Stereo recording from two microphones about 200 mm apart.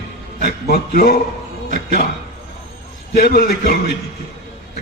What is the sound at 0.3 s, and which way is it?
A man's voice, 45° left (ahead or behind).